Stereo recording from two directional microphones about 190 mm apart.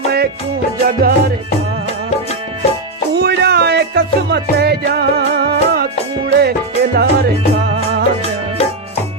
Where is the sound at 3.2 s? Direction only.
60° right (ahead or behind).